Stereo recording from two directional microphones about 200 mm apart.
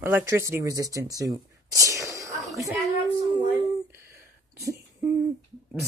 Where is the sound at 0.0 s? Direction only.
15° right (ahead or behind).